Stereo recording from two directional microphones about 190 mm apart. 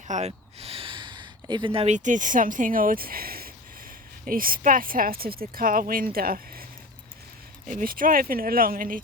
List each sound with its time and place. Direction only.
0.1 s speech: 35° right (ahead or behind); by 6.7 s 50° right (ahead or behind)
7.7 s speech: 45° right (ahead or behind)